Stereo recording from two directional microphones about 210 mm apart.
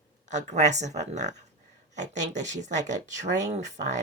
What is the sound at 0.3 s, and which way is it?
Speech, 35° right (ahead or behind).